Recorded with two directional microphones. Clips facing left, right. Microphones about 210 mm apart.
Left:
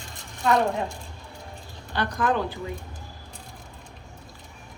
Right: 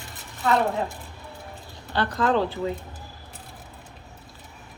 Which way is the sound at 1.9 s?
15° left (ahead or behind).